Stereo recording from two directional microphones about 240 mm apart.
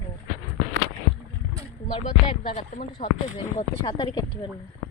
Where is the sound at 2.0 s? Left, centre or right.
Left.